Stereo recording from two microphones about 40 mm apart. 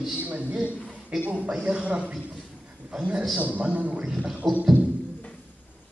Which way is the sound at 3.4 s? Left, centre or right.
Right.